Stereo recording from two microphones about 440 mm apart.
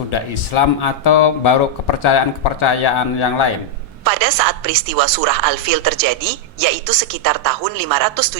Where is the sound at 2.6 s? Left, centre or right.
Left.